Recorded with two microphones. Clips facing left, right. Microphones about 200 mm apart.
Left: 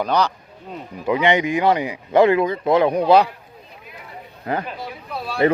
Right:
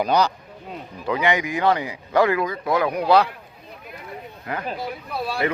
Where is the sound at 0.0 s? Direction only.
10° right (ahead or behind).